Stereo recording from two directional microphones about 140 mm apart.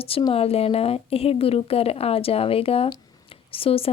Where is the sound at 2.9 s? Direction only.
40° left (ahead or behind).